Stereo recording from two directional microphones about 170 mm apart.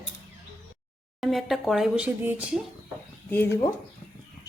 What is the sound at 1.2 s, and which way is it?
A woman's voice, centre (ahead or behind).